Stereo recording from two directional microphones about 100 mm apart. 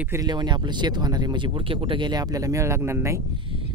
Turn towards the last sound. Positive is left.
turn(degrees=-25)  # may be behind; listen again after turning